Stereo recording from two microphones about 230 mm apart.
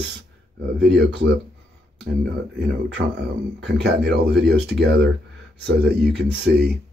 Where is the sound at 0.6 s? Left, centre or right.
Right.